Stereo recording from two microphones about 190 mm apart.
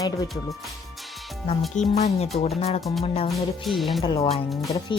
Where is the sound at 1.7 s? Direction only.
35° left (ahead or behind).